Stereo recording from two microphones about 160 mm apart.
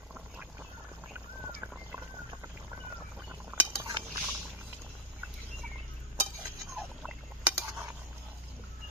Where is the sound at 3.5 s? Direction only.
20° right (ahead or behind).